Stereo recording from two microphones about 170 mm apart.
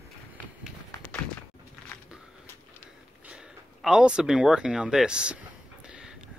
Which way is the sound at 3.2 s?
5° right (ahead or behind).